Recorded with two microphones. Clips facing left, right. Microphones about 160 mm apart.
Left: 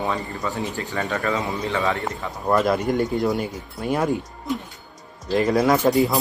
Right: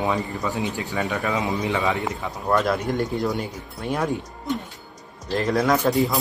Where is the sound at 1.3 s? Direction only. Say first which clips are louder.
Right 1 dB; 15° right (ahead or behind).